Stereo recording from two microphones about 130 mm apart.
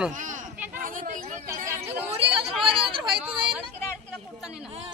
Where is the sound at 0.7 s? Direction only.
90° right.